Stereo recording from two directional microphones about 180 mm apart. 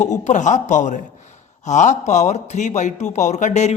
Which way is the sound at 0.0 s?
40° left (ahead or behind).